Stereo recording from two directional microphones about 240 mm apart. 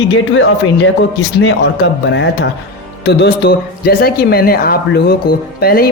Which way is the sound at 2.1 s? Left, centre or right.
Left.